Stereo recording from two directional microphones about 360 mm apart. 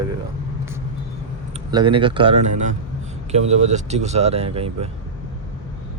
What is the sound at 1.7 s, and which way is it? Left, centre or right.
Speech, centre.